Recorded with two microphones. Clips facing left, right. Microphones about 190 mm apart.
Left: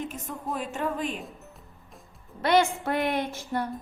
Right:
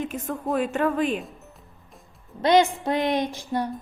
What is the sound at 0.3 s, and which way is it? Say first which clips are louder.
Speech: right 11 dB; 65° right (ahead or behind).